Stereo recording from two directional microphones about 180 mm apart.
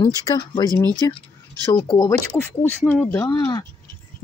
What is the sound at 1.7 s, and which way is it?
Speech, 20° left (ahead or behind).